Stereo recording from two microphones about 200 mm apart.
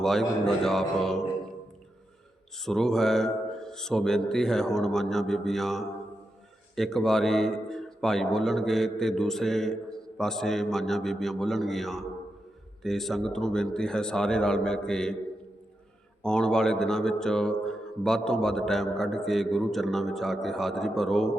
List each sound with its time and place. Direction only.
0.0 s speech: centre (ahead or behind)
2.6 s speech: centre (ahead or behind)
16.2 s speech: 5° left (ahead or behind)